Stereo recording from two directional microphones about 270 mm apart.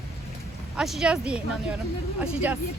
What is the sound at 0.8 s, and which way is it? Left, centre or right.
Speech, centre.